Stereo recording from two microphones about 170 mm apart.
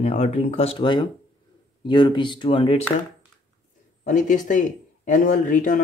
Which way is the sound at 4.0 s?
45° left (ahead or behind).